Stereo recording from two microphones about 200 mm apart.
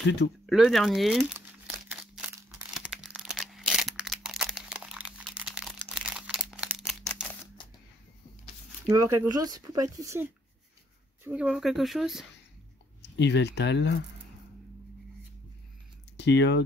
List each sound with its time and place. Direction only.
0.5 s speech: centre (ahead or behind)
1.9 s crumpling: 10° right (ahead or behind)
8.8 s speech: 15° right (ahead or behind)
13.0 s speech: 60° left (ahead or behind)
16.2 s speech: 60° left (ahead or behind)